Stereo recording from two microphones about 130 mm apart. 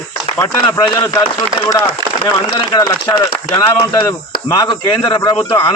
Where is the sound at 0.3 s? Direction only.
25° left (ahead or behind).